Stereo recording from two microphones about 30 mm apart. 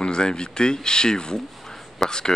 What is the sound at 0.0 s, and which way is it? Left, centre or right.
Speech, left.